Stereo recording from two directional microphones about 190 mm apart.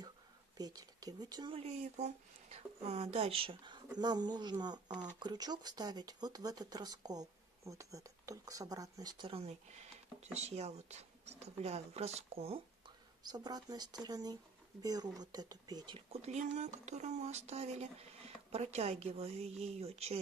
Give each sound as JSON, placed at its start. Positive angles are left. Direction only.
{"t": 0.6, "sound": "speech", "side_deg": -20}
{"t": 13.2, "sound": "speech", "side_deg": -20}